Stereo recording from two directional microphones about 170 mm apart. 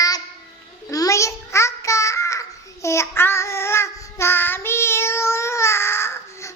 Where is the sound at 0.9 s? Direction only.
20° left (ahead or behind).